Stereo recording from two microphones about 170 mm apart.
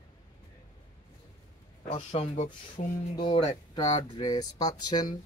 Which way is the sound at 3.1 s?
25° left (ahead or behind).